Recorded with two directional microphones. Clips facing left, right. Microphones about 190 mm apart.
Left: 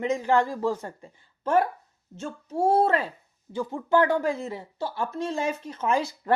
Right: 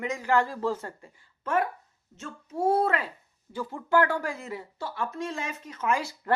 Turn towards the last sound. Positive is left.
turn(degrees=30)  # may be behind; listen again after turning